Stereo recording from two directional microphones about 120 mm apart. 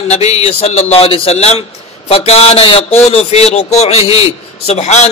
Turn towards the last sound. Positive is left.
turn(degrees=65)  # may be behind; listen again after turning